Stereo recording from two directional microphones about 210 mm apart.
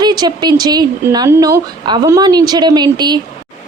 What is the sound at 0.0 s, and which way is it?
A woman's voice, 20° right (ahead or behind).